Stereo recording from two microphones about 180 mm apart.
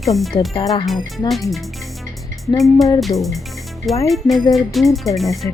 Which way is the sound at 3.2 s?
Centre (ahead or behind).